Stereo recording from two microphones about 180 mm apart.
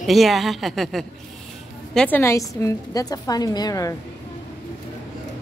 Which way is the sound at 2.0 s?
10° left (ahead or behind).